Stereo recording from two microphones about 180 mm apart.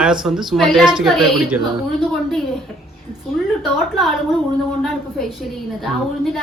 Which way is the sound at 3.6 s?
Centre (ahead or behind).